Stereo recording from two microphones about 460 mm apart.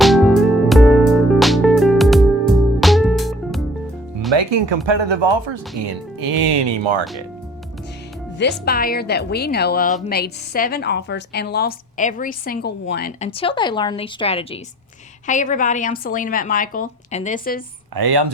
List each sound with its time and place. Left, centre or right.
0.0 s music: centre
4.4 s speech: right
5.8 s speech: right
8.4 s speech: left
17.9 s speech: right